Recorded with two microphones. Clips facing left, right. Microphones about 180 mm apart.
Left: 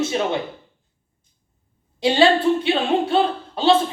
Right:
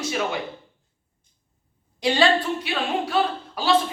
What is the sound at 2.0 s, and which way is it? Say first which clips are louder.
Speech: left 4 dB; 25° left (ahead or behind).